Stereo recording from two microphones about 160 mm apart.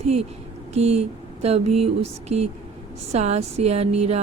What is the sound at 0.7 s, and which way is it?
A woman's voice, 40° right (ahead or behind).